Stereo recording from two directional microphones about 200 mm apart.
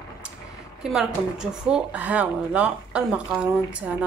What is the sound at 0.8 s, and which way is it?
A woman's voice, 5° right (ahead or behind).